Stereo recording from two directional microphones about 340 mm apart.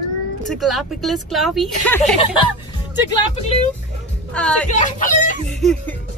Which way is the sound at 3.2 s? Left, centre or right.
Centre.